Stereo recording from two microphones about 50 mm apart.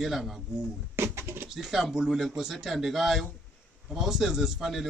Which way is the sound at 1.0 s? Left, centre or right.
Right.